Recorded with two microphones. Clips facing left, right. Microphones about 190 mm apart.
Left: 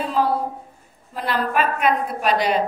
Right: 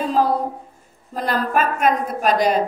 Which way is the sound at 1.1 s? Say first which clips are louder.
Right 2 dB; 40° right (ahead or behind).